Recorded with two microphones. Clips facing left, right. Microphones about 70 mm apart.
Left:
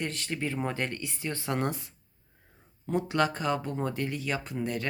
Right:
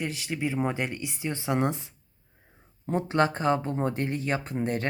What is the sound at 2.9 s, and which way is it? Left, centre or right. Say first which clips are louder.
Speech: right 2 dB; right.